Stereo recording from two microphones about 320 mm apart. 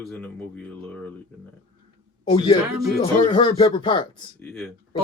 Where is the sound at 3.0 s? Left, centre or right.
Centre.